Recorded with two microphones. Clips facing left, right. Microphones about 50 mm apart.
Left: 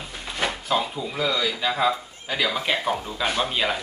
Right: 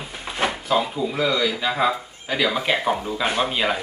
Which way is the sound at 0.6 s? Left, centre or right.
Centre.